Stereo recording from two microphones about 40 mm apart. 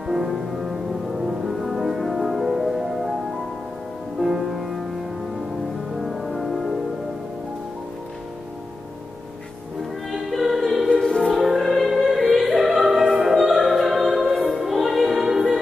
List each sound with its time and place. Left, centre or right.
0.0 s music: centre
4.2 s music: centre
5.9 s music: centre
10.1 s music: centre
10.9 s music: centre
11.3 s music: centre